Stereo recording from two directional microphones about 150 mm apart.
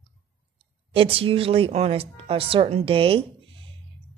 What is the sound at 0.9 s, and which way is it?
Speech, 40° right (ahead or behind).